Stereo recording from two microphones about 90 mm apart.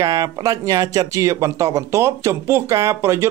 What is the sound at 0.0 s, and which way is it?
Speech, 40° right (ahead or behind).